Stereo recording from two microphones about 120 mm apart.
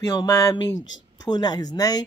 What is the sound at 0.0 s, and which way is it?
Speech, 25° left (ahead or behind).